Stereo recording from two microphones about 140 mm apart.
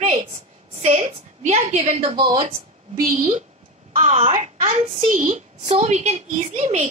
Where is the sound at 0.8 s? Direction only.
55° right (ahead or behind).